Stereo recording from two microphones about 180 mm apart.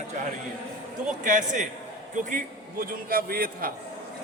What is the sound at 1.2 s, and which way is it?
A man's voice, 45° right (ahead or behind).